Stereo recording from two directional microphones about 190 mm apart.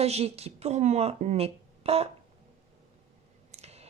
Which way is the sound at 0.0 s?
35° right (ahead or behind).